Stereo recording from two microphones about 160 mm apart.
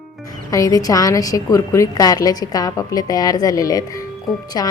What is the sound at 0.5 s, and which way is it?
A woman's voice, 20° left (ahead or behind).